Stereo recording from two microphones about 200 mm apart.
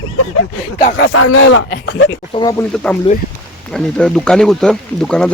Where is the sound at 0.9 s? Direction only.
80° left.